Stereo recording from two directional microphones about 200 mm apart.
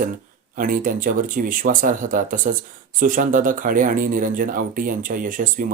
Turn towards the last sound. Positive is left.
turn(degrees=-45)  # may be behind; listen again after turning